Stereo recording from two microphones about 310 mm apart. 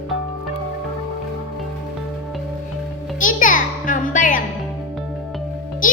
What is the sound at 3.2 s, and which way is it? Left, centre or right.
A child's voice, left.